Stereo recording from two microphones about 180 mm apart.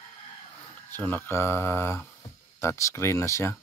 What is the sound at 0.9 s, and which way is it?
Speech, 10° left (ahead or behind).